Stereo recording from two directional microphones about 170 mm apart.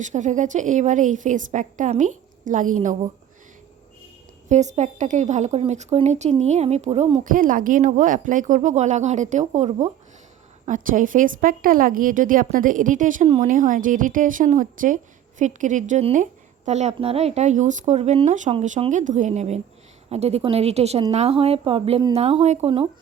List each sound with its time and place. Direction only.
0.0 s a woman's voice: 45° right (ahead or behind)
4.4 s a woman's voice: 45° right (ahead or behind)
13.2 s speech: 35° right (ahead or behind)
13.5 s a woman's voice: 50° right (ahead or behind); by 22.9 s 35° right (ahead or behind)